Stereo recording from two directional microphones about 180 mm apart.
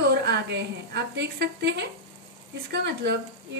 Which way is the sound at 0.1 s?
65° right (ahead or behind).